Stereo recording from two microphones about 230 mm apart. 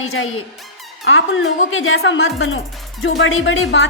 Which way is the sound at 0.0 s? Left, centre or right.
Left.